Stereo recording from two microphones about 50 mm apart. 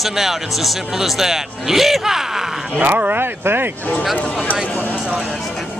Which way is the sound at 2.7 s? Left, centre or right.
Right.